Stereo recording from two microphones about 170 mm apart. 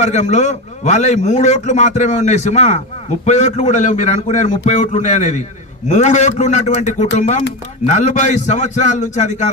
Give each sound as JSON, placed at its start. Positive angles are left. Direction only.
{"t": 0.0, "sound": "a man's voice", "side_deg": 45}